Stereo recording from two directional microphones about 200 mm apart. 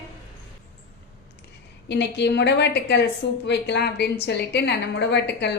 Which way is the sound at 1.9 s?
60° left (ahead or behind).